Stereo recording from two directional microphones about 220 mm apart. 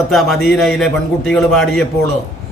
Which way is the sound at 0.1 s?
Centre (ahead or behind).